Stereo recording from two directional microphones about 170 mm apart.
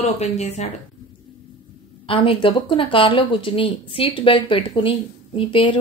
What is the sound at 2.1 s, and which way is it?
A woman's voice, 30° left (ahead or behind).